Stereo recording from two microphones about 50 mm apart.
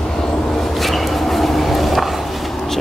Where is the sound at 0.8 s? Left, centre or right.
Centre.